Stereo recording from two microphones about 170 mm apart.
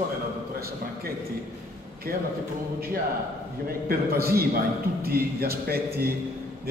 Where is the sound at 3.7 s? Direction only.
65° right (ahead or behind).